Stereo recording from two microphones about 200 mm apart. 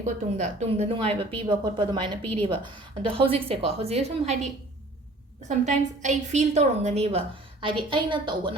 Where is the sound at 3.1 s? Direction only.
25° right (ahead or behind).